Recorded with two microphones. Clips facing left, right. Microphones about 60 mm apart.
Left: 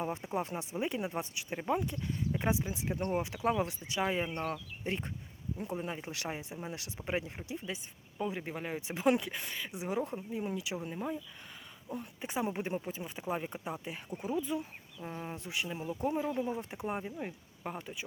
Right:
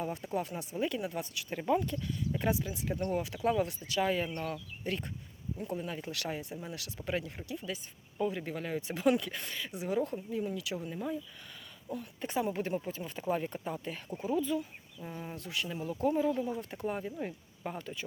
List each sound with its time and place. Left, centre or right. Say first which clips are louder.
0.0 s speech: even; left